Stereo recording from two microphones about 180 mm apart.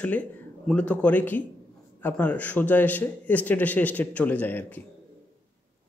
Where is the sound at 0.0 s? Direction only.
5° left (ahead or behind).